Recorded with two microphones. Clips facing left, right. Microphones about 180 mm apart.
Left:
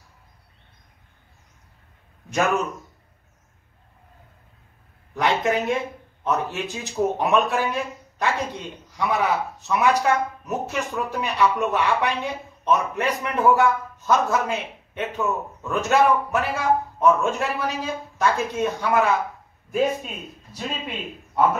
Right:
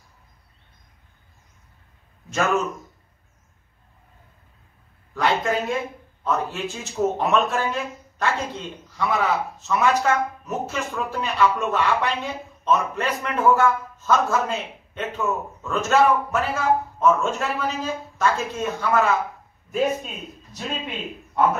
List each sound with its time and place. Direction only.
2.2 s a man's voice: 15° left (ahead or behind)
5.1 s a sound: 20° left (ahead or behind)
6.2 s a man's voice: 20° left (ahead or behind)